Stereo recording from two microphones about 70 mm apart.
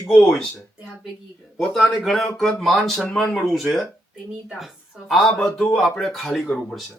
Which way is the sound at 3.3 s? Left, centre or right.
Centre.